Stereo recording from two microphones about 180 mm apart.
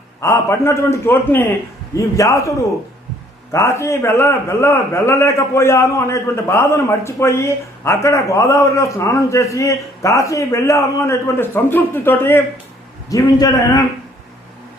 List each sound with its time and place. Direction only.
0.2 s a man's voice: 15° left (ahead or behind)
3.5 s a man's voice: 15° left (ahead or behind)